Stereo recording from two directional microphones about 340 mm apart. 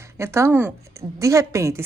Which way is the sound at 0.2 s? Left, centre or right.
Centre.